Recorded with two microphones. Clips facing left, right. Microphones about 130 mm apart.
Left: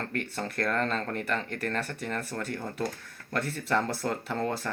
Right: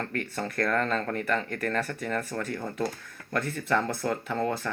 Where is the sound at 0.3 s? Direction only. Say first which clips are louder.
Right 3 dB; 30° left (ahead or behind).